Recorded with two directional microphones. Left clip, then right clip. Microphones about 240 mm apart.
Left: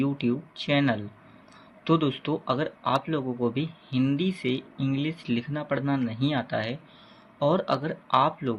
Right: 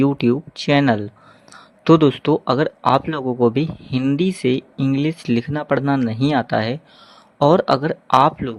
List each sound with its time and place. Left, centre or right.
0.0 s speech: right